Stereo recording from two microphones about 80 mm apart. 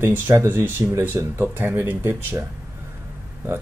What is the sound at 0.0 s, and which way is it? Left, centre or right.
Speech, right.